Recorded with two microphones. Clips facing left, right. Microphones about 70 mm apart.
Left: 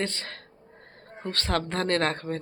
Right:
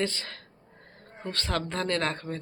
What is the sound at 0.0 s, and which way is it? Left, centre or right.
Speech, left.